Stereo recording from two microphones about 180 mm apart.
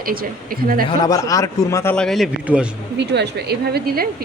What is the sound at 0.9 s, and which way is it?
A man's voice, 20° left (ahead or behind).